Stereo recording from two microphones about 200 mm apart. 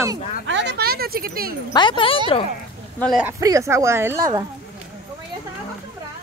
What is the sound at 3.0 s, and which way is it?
Speech, centre (ahead or behind).